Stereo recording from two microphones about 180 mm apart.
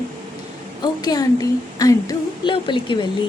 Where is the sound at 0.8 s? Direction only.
20° left (ahead or behind).